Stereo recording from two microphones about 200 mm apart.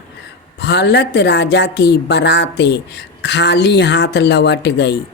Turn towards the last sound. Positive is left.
turn(degrees=60)  # may be behind; listen again after turning